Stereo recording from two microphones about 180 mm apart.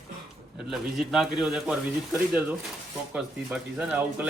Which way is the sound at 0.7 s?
Centre (ahead or behind).